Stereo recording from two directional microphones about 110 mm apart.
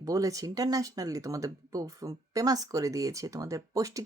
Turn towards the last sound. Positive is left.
turn(degrees=-30)  # may be behind; listen again after turning